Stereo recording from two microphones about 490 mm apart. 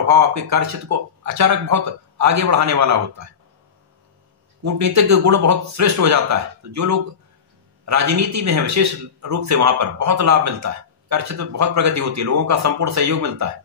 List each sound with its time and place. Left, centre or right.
0.0 s a man's voice: right
4.6 s a man's voice: right